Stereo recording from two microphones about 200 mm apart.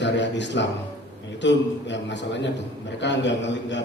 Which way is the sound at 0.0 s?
60° left (ahead or behind).